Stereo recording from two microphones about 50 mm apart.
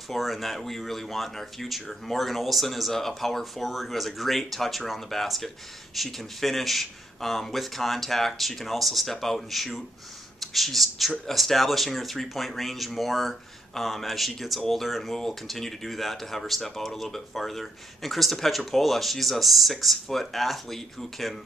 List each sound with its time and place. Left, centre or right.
0.1 s speech: centre